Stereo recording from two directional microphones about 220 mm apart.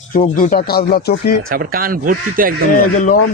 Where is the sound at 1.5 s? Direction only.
40° right (ahead or behind).